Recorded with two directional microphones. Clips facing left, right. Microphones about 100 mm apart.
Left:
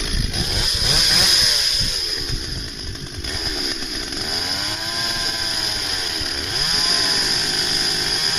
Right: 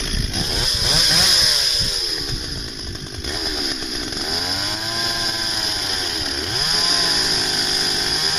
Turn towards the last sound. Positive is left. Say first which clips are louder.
# right 1 dB
turn(degrees=0)  # may be behind; listen again after turning